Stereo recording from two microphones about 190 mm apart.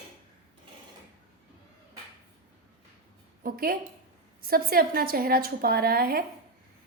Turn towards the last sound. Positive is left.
turn(degrees=-50)  # may be behind; listen again after turning